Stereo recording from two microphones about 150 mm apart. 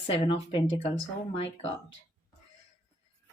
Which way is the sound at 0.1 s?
40° left (ahead or behind).